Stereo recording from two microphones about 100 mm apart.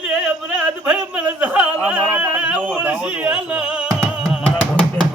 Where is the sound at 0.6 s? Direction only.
10° right (ahead or behind).